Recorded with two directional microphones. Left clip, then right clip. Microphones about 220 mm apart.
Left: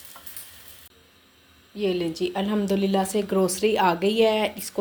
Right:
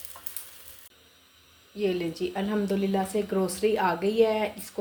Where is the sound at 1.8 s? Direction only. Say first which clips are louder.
Left 3 dB; 15° left (ahead or behind).